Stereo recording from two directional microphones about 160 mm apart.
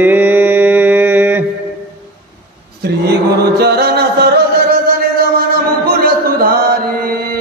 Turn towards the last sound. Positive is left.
turn(degrees=-65)  # may be behind; listen again after turning